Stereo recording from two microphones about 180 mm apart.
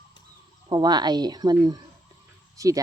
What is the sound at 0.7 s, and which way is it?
Speech, 25° right (ahead or behind).